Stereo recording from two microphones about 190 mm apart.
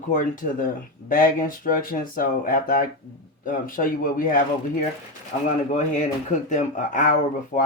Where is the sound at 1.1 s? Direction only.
45° left (ahead or behind).